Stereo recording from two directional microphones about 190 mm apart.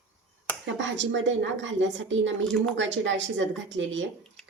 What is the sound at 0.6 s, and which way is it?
A woman's voice, 75° right (ahead or behind).